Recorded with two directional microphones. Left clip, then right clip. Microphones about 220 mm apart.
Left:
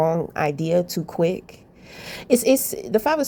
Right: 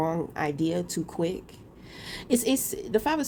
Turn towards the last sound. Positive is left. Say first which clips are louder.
# left 6 dB
turn(degrees=30)  # may be behind; listen again after turning